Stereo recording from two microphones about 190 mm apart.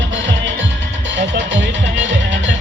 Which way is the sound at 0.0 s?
75° right (ahead or behind).